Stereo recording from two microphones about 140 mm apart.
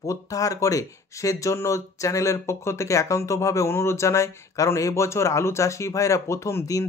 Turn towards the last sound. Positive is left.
turn(degrees=20)  # may be behind; listen again after turning